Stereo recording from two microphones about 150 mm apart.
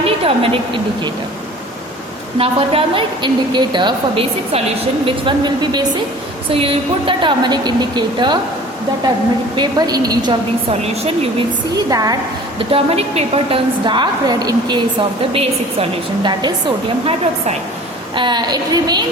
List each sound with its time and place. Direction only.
0.0 s a sound: 40° right (ahead or behind)
2.4 s a woman's voice: 40° right (ahead or behind)
6.5 s a woman's voice: 40° right (ahead or behind)
9.6 s a woman's voice: 25° right (ahead or behind)
10.7 s speech: 45° right (ahead or behind)
11.9 s a woman's voice: 25° right (ahead or behind)
12.5 s a woman's voice: 40° right (ahead or behind)
15.3 s a woman's voice: 40° right (ahead or behind)
18.1 s a woman's voice: 30° right (ahead or behind)